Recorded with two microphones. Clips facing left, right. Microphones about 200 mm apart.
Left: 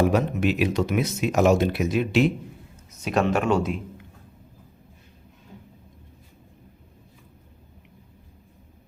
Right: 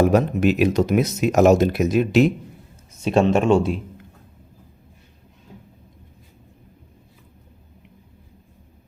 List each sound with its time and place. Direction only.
0.0 s speech: 40° right (ahead or behind)
3.0 s speech: 25° right (ahead or behind)